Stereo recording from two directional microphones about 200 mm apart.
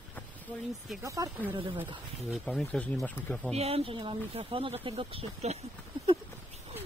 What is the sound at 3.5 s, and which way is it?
Speech, 30° right (ahead or behind).